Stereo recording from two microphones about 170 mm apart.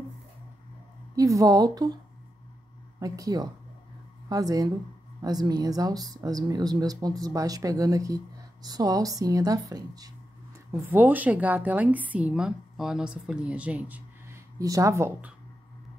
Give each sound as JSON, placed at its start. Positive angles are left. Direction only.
{"t": 1.1, "sound": "speech", "side_deg": -20}
{"t": 3.0, "sound": "speech", "side_deg": -20}
{"t": 10.9, "sound": "a woman's voice", "side_deg": -10}